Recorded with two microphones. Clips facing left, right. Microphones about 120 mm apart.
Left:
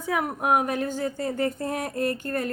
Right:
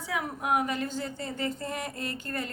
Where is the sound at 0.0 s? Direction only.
55° left (ahead or behind).